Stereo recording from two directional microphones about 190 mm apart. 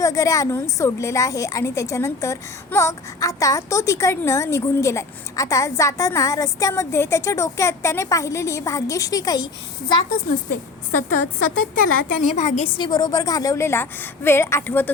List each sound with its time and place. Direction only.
0.0 s a woman's voice: 15° left (ahead or behind)
10.5 s a woman's voice: 45° left (ahead or behind)
12.7 s a woman's voice: 20° left (ahead or behind)